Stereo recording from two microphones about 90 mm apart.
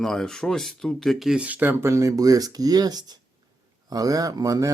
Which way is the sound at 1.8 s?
35° right (ahead or behind).